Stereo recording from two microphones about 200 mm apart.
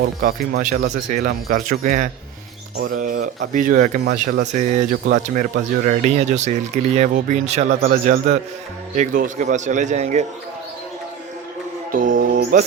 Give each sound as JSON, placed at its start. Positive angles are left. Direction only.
{"t": 0.0, "sound": "speech", "side_deg": -45}
{"t": 2.7, "sound": "speech", "side_deg": -50}
{"t": 11.9, "sound": "music", "side_deg": -45}